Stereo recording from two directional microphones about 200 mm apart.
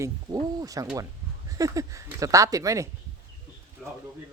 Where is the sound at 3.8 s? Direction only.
Centre (ahead or behind).